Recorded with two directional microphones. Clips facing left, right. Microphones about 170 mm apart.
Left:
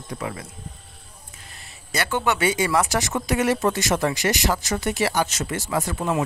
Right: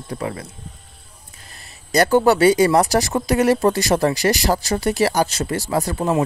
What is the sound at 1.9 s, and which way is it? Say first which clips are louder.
Speech: right 9 dB; 40° right (ahead or behind).